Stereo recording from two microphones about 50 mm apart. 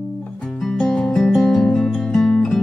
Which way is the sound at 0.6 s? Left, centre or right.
Centre.